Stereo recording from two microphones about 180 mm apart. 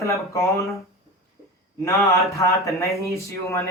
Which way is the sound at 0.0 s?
15° left (ahead or behind).